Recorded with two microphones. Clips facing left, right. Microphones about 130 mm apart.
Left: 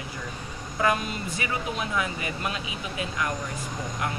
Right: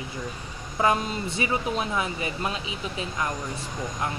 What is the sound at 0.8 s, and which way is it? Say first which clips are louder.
Speech: right 2 dB; 25° right (ahead or behind).